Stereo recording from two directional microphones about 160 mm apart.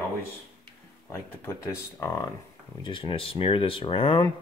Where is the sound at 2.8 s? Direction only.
30° left (ahead or behind).